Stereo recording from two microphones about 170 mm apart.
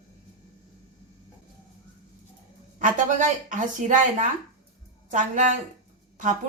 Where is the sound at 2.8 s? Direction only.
50° right (ahead or behind).